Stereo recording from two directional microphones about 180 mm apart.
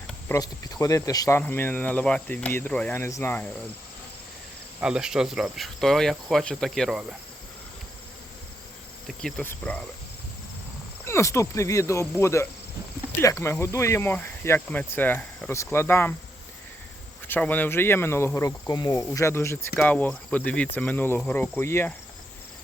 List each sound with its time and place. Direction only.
0.3 s speech: 20° left (ahead or behind)
4.8 s cricket: 5° right (ahead or behind)
9.0 s speech: 5° left (ahead or behind)
11.0 s speech: 15° left (ahead or behind)
17.2 s speech: 10° left (ahead or behind)